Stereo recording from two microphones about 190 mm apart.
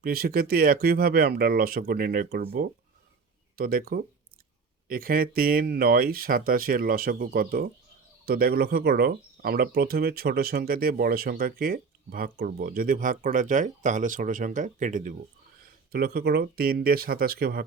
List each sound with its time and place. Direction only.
0.0 s speech: 50° right (ahead or behind)
15.9 s speech: 55° right (ahead or behind)